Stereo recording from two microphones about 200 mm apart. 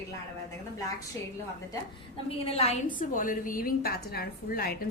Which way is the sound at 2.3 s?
30° left (ahead or behind).